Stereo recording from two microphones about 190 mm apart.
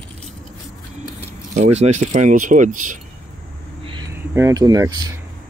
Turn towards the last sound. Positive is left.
turn(degrees=-20)  # may be behind; listen again after turning